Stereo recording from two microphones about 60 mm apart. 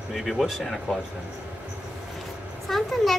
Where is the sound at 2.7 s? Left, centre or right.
Centre.